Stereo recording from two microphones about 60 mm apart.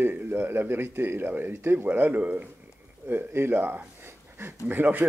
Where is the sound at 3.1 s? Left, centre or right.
Right.